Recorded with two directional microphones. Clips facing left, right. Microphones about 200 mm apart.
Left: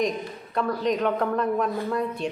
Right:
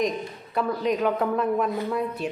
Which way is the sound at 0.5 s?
5° right (ahead or behind).